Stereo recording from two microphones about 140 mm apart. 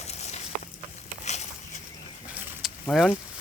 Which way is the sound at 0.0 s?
50° left (ahead or behind).